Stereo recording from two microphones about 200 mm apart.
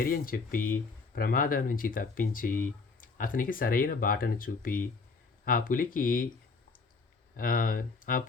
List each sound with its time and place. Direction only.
0.0 s speech: 45° left (ahead or behind)
7.3 s speech: 45° left (ahead or behind)